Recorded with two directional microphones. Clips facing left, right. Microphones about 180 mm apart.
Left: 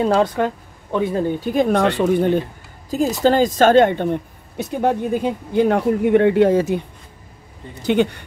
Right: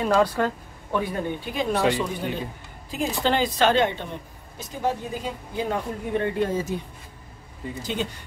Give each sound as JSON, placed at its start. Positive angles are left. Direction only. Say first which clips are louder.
{"t": 0.0, "sound": "speech", "louder": "left 4 dB", "side_deg": 25}
{"t": 1.2, "sound": "speech", "louder": "left 9 dB", "side_deg": 45}
{"t": 2.9, "sound": "a woman's voice", "louder": "left 8 dB", "side_deg": 40}
{"t": 7.8, "sound": "a woman's voice", "louder": "left 13 dB", "side_deg": 65}